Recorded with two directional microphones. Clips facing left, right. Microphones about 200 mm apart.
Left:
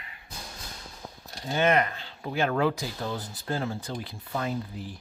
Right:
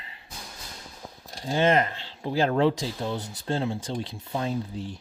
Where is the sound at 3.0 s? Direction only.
15° right (ahead or behind).